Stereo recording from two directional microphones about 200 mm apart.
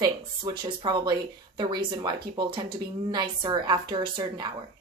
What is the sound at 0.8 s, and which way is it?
Speech, 20° right (ahead or behind).